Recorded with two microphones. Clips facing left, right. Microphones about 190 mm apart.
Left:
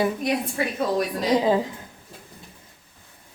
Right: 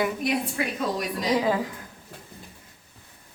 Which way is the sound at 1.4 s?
25° left (ahead or behind).